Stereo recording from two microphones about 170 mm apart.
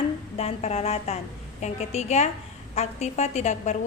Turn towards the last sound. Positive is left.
turn(degrees=40)  # may be behind; listen again after turning